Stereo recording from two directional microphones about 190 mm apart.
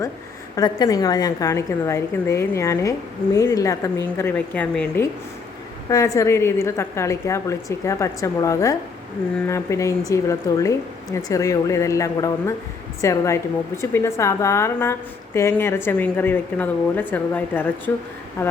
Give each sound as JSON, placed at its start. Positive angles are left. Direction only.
{"t": 0.5, "sound": "a woman's voice", "side_deg": 20}